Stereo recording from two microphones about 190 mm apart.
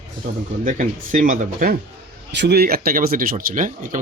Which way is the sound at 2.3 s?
60° right (ahead or behind).